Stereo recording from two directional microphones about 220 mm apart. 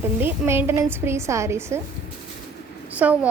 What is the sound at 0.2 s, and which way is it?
A woman's voice, 10° right (ahead or behind).